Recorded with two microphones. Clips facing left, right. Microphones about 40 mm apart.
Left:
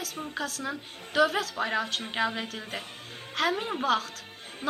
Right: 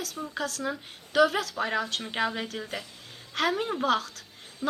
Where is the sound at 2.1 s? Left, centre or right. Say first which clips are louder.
Even; centre.